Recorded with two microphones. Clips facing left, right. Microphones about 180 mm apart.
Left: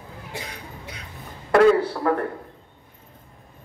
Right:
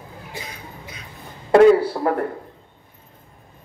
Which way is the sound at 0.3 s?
70° left (ahead or behind).